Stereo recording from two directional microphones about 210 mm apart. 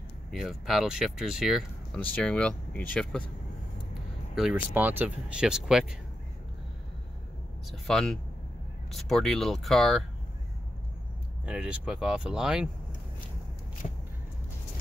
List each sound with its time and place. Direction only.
0.3 s speech: centre (ahead or behind)
4.4 s speech: 5° right (ahead or behind)
7.7 s speech: centre (ahead or behind)
11.4 s speech: 5° right (ahead or behind)
13.8 s vehicle: 30° left (ahead or behind)